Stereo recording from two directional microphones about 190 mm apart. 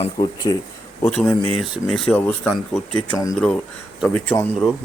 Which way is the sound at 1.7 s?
Centre (ahead or behind).